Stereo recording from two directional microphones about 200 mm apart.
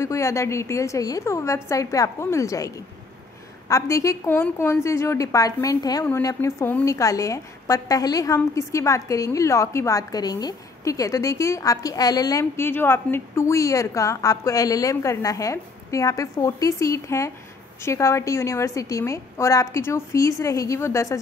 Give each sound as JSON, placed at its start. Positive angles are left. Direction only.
{"t": 0.0, "sound": "a woman's voice", "side_deg": 15}